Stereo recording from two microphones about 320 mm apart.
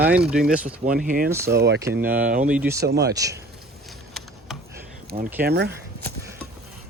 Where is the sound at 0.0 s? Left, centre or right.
Centre.